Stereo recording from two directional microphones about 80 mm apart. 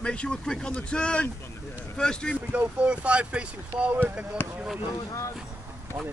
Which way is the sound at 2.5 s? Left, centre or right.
Centre.